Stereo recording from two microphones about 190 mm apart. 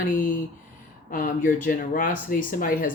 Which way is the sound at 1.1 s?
45° left (ahead or behind).